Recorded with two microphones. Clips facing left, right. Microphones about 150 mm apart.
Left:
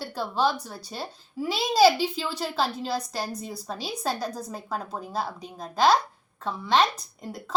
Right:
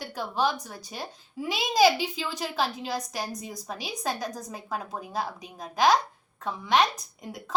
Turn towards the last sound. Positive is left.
turn(degrees=-15)  # may be behind; listen again after turning